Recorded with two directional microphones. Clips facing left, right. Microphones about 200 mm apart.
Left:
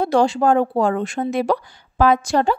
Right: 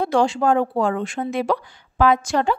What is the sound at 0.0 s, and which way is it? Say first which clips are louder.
Speech: left 2 dB; 40° left (ahead or behind).